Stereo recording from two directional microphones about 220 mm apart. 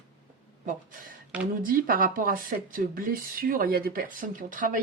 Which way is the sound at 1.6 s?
40° right (ahead or behind).